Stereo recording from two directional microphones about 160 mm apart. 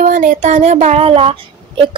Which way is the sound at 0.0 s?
55° right (ahead or behind).